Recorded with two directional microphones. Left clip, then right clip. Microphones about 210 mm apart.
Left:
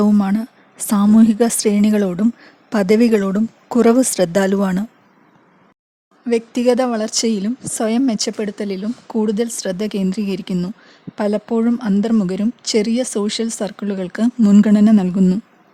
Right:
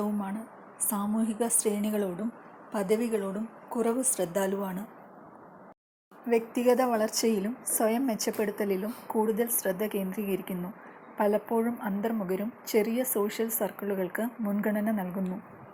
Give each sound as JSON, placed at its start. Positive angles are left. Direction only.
{"t": 0.0, "sound": "a woman's voice", "side_deg": 45}
{"t": 6.2, "sound": "a woman's voice", "side_deg": 45}